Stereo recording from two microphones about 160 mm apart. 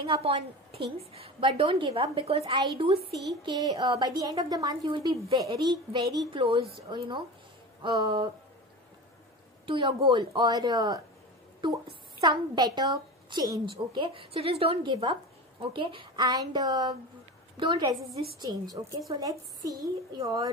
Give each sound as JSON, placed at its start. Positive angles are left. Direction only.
{"t": 0.0, "sound": "a woman's voice", "side_deg": -35}
{"t": 9.7, "sound": "a woman's voice", "side_deg": -30}